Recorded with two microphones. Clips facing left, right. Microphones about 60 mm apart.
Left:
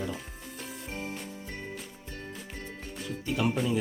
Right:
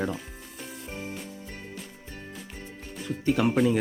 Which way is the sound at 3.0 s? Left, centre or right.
Right.